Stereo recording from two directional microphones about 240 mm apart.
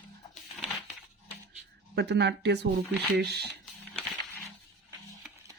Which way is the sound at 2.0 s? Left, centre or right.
Right.